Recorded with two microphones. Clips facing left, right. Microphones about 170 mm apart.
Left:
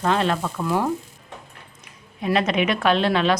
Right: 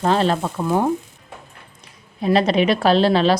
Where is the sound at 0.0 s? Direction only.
35° right (ahead or behind).